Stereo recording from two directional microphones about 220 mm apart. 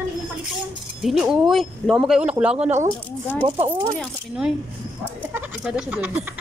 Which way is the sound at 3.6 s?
20° right (ahead or behind).